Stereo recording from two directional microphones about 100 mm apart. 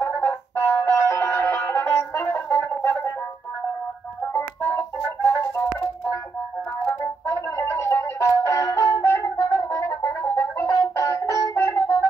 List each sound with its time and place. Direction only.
0.0 s music: 25° left (ahead or behind)
4.3 s music: 25° left (ahead or behind)
7.2 s music: 30° left (ahead or behind)